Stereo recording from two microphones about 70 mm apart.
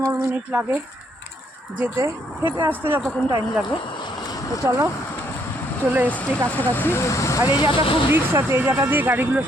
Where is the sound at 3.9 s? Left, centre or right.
Left.